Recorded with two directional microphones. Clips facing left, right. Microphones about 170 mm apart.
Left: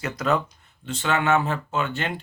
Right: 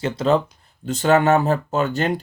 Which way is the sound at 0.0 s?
30° right (ahead or behind).